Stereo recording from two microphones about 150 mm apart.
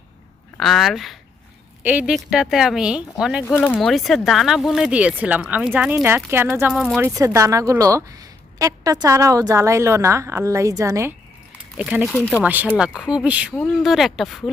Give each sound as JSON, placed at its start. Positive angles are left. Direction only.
{"t": 0.6, "sound": "speech", "side_deg": 0}
{"t": 3.4, "sound": "speech", "side_deg": 15}
{"t": 3.8, "sound": "speech", "side_deg": 0}
{"t": 6.7, "sound": "speech", "side_deg": 0}
{"t": 7.0, "sound": "a woman's voice", "side_deg": -20}
{"t": 11.8, "sound": "speech", "side_deg": -5}